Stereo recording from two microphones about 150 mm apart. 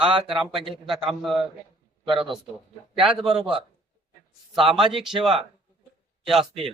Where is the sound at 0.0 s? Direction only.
35° right (ahead or behind).